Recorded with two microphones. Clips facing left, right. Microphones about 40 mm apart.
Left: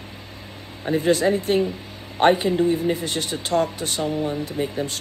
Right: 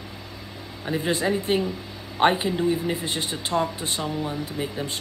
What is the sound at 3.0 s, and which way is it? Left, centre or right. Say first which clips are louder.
Speech: left 2 dB; right.